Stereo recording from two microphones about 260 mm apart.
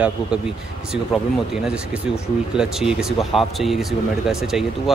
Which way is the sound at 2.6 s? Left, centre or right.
Centre.